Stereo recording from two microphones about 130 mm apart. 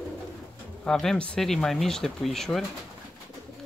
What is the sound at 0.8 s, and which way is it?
Speech, 5° left (ahead or behind).